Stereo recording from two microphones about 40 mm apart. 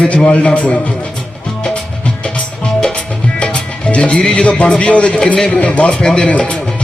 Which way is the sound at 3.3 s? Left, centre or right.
Left.